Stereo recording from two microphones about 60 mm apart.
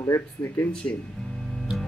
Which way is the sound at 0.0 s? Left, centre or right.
Left.